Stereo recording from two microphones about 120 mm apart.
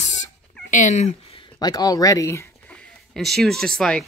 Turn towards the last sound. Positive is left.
turn(degrees=5)  # may be behind; listen again after turning